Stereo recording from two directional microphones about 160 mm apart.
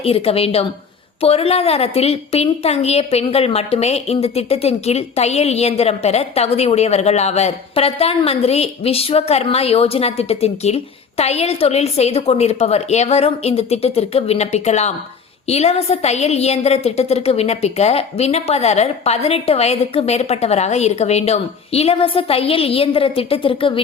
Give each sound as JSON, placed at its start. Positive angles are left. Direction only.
{"t": 0.0, "sound": "a woman's voice", "side_deg": 35}